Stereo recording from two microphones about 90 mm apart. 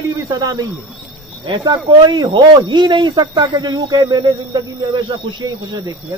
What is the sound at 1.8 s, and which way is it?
Speech, 55° right (ahead or behind).